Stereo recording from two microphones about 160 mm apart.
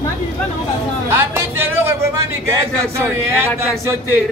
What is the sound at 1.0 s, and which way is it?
Speech, 15° right (ahead or behind).